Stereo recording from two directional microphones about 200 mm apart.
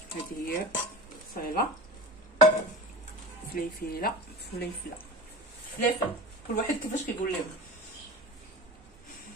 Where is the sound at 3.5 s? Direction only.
50° left (ahead or behind).